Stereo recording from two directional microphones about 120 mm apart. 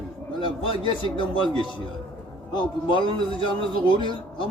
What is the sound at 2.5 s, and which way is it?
Speech, 45° left (ahead or behind).